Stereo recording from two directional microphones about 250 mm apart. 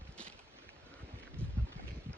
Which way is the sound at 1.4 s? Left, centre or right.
Centre.